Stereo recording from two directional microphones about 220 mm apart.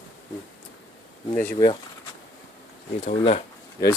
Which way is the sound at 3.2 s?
25° left (ahead or behind).